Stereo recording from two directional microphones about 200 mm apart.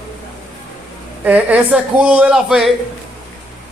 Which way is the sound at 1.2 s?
5° right (ahead or behind).